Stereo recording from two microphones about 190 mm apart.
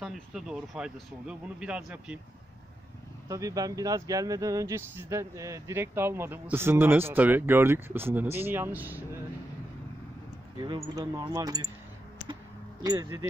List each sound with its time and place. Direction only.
0.0 s speech: centre (ahead or behind)
3.3 s speech: 15° right (ahead or behind)
10.6 s speech: 20° right (ahead or behind)
12.8 s speech: 15° right (ahead or behind)